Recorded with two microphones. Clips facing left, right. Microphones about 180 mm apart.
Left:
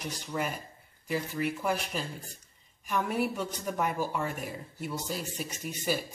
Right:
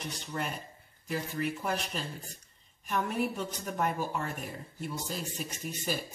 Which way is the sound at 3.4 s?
5° right (ahead or behind).